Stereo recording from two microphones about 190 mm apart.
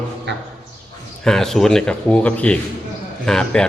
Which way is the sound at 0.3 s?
65° right (ahead or behind).